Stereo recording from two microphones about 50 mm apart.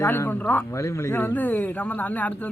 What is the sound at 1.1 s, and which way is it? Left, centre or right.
Speech, left.